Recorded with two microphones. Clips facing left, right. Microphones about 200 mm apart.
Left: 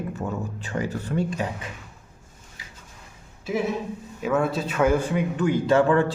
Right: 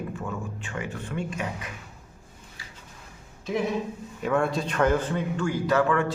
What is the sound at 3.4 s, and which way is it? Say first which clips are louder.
A man's voice: left 1 dB; 5° left (ahead or behind).